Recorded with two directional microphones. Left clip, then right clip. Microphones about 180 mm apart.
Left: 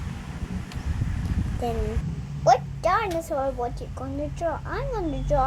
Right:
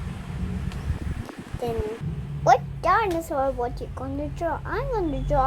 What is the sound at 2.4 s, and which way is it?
A woman's voice, 25° right (ahead or behind).